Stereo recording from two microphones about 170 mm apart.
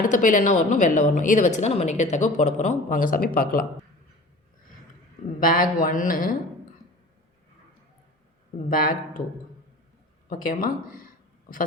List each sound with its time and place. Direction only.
0.0 s a woman's voice: 50° left (ahead or behind)
5.4 s a man's voice: 55° left (ahead or behind)
8.7 s a man's voice: 55° left (ahead or behind)
10.2 s a sound: 50° left (ahead or behind)